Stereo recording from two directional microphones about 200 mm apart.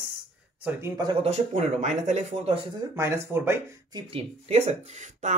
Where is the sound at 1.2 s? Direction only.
35° right (ahead or behind).